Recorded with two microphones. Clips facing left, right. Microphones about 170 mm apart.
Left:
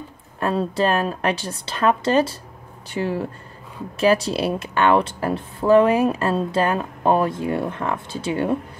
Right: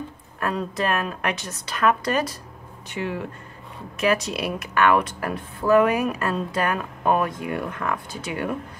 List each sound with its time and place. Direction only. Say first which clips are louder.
0.4 s speech: left 5 dB; 30° left (ahead or behind)